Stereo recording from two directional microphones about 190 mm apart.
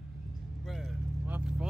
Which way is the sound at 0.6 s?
Centre (ahead or behind).